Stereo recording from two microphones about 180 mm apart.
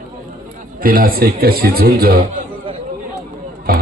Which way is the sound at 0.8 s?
55° right (ahead or behind).